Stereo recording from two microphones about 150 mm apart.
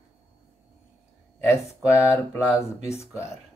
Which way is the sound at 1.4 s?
15° left (ahead or behind).